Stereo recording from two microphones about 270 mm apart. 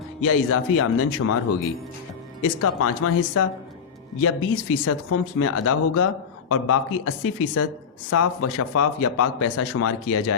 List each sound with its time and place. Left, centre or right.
0.3 s a man's voice: left
8.1 s a man's voice: left